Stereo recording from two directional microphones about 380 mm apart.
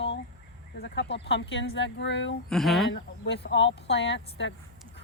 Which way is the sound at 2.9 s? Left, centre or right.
Left.